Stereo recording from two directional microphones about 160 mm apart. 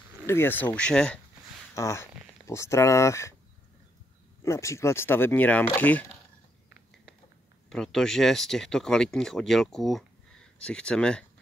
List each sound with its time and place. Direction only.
0.3 s speech: 15° left (ahead or behind)
1.8 s speech: 15° left (ahead or behind)
4.4 s speech: 20° left (ahead or behind)
7.7 s speech: 5° left (ahead or behind)